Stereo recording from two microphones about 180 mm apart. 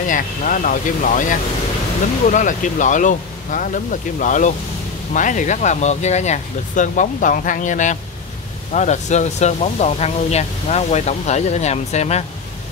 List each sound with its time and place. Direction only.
0.1 s speech: 45° left (ahead or behind)